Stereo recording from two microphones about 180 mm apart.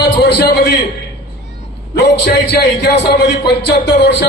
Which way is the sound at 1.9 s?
70° left (ahead or behind).